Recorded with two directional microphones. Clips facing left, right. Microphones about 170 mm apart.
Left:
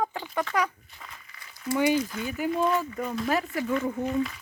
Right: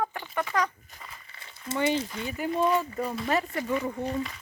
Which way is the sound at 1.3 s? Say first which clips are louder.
Left 6 dB; 30° right (ahead or behind).